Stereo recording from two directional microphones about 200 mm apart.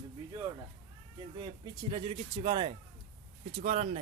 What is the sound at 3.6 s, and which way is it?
Speech, 35° right (ahead or behind).